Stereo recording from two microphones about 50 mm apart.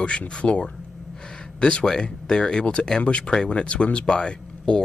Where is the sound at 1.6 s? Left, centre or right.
Centre.